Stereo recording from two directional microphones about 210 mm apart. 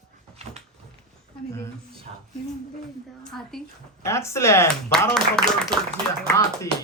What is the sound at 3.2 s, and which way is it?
Speech, centre (ahead or behind).